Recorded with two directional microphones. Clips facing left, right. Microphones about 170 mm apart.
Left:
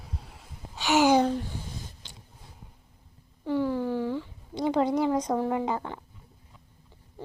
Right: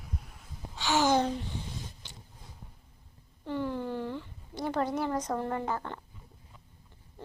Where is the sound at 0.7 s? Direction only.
15° left (ahead or behind).